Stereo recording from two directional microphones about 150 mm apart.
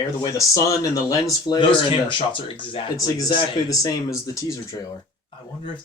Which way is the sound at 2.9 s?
25° left (ahead or behind).